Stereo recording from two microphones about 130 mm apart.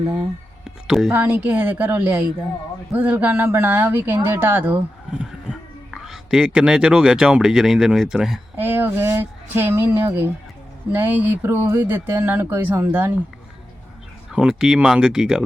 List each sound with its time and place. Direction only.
0.9 s speech: 5° right (ahead or behind)
8.5 s speech: 15° right (ahead or behind)
14.3 s speech: 5° right (ahead or behind)